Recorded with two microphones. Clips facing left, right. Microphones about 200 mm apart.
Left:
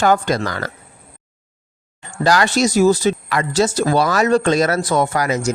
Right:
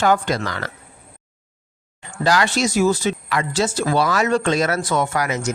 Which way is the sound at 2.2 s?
40° left (ahead or behind).